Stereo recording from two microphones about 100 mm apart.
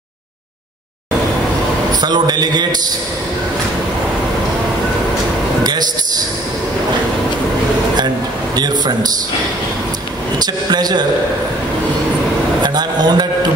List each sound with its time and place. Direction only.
1.9 s a man's voice: 45° right (ahead or behind)
5.6 s a man's voice: 40° right (ahead or behind)
8.5 s a man's voice: 45° right (ahead or behind)
10.4 s a man's voice: 45° right (ahead or behind)
12.6 s a man's voice: 45° right (ahead or behind)